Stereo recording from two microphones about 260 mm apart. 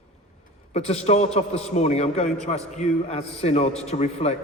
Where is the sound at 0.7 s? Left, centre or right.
Left.